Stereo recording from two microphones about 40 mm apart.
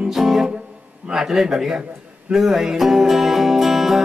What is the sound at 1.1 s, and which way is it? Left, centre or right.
Speech, centre.